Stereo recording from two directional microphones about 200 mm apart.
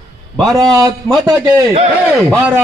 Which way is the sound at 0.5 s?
15° right (ahead or behind).